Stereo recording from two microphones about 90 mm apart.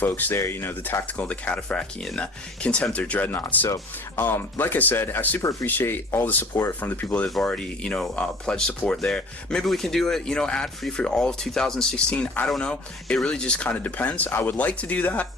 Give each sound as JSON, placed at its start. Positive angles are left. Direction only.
{"t": 0.0, "sound": "speech", "side_deg": 20}
{"t": 5.4, "sound": "speech", "side_deg": 40}
{"t": 5.6, "sound": "speech", "side_deg": 20}
{"t": 7.3, "sound": "speech", "side_deg": 5}